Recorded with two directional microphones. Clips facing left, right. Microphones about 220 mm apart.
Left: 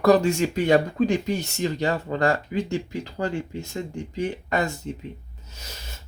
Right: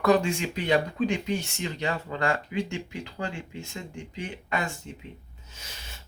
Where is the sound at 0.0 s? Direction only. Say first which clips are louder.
Left 5 dB; 40° left (ahead or behind).